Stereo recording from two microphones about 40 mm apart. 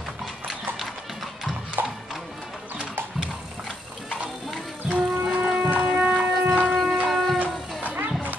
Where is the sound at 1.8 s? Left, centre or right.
Right.